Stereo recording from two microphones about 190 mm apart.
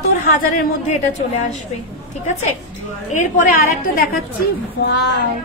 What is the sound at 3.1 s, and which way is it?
Speech, 40° left (ahead or behind).